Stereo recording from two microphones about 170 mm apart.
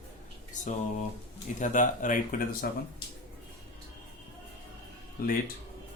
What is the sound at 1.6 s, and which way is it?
Speech, 50° left (ahead or behind).